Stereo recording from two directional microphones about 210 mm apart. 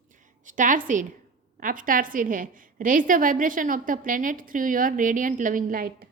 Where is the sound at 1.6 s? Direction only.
40° right (ahead or behind).